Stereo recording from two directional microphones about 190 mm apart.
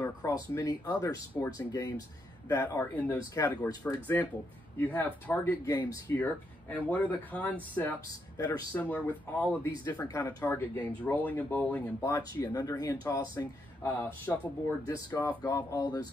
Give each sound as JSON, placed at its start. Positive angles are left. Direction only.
{"t": 0.0, "sound": "speech", "side_deg": 20}
{"t": 9.8, "sound": "speech", "side_deg": 20}
{"t": 13.8, "sound": "speech", "side_deg": 10}